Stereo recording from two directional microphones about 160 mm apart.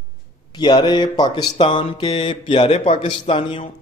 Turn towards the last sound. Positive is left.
turn(degrees=35)  # may be behind; listen again after turning